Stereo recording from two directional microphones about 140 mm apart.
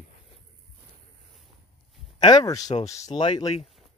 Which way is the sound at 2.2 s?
25° left (ahead or behind).